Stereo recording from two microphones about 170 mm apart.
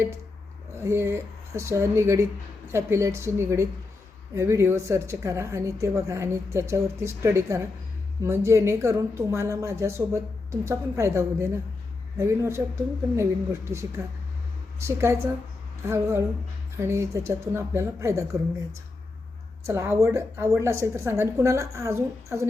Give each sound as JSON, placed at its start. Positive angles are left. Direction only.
{"t": 0.8, "sound": "a woman's voice", "side_deg": -15}
{"t": 19.6, "sound": "a woman's voice", "side_deg": -15}